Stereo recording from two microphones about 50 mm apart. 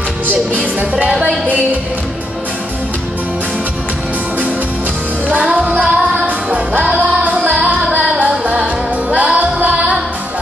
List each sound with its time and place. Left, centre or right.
5.5 s music: right
7.2 s music: right
7.6 s female singing: right
8.3 s music: right